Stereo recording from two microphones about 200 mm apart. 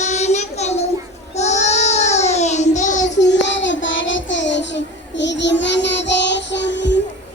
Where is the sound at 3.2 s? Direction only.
60° left (ahead or behind).